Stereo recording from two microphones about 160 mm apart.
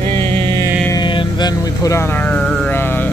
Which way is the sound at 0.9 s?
30° left (ahead or behind).